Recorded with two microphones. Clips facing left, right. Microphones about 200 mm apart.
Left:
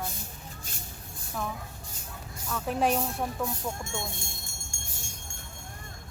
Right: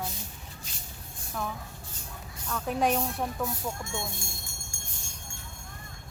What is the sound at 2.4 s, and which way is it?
Speech, 5° left (ahead or behind).